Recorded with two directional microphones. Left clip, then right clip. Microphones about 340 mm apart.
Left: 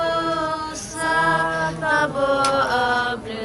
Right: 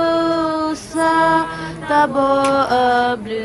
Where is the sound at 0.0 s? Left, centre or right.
Centre.